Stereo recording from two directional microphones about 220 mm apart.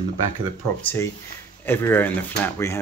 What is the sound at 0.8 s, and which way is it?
Speech, 10° left (ahead or behind).